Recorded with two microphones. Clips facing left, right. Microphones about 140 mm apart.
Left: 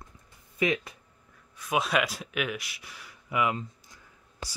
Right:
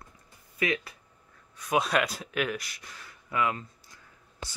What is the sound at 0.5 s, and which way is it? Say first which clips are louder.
Speech: left 2 dB; 20° left (ahead or behind).